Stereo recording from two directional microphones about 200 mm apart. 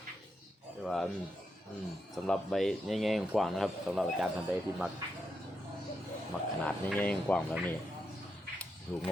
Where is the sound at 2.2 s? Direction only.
5° left (ahead or behind).